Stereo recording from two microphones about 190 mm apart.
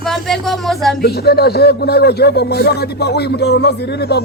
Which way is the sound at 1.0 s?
55° left (ahead or behind).